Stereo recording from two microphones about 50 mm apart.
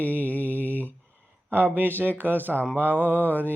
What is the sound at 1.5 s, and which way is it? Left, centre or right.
Mantra, right.